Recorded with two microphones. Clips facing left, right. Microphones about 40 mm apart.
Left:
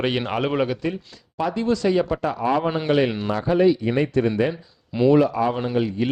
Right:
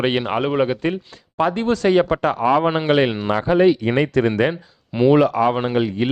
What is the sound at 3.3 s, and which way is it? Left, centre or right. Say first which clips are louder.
Speech: right 3 dB; right.